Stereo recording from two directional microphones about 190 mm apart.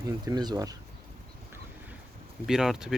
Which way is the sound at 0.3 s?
20° right (ahead or behind).